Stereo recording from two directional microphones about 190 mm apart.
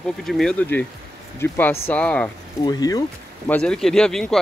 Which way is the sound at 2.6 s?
20° left (ahead or behind).